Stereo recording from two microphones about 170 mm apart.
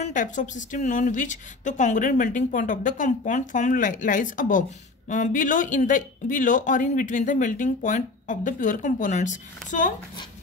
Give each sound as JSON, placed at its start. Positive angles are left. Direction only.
{"t": 0.0, "sound": "a woman's voice", "side_deg": 50}